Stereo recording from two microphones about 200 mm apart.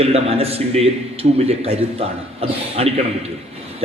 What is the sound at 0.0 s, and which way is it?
A man's voice, 30° right (ahead or behind).